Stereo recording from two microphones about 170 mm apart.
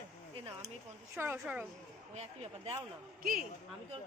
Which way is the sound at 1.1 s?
15° right (ahead or behind).